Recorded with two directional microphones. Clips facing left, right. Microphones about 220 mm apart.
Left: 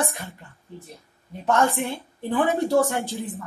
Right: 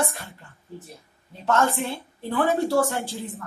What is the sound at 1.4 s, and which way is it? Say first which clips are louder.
A woman's voice: left 1 dB; 15° left (ahead or behind).